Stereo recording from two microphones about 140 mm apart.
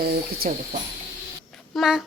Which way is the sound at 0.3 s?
90° right.